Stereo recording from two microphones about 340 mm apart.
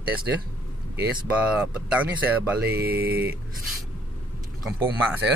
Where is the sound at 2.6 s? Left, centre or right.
Right.